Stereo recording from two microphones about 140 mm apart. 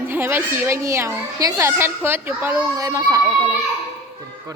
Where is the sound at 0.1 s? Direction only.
15° right (ahead or behind).